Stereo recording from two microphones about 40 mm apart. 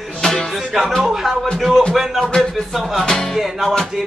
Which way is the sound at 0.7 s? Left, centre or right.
Centre.